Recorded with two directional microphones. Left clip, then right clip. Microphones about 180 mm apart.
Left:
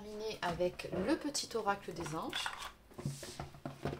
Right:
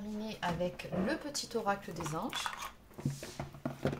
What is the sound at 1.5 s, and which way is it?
Speech, 15° left (ahead or behind).